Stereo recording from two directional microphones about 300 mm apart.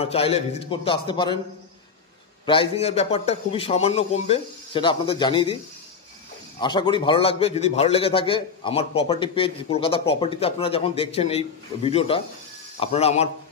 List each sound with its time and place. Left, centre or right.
0.0 s a man's voice: centre
2.4 s a man's voice: centre
6.6 s a man's voice: centre